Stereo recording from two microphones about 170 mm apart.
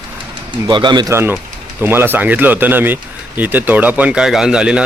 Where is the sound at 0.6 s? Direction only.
25° right (ahead or behind); by 4.8 s 5° right (ahead or behind).